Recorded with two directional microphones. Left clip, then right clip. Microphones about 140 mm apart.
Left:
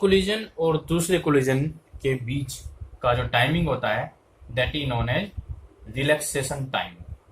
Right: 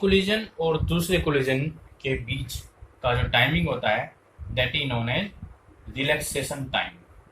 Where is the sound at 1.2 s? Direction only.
90° left.